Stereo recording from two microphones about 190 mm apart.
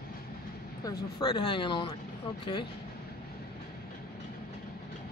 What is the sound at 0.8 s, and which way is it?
Speech, 20° left (ahead or behind).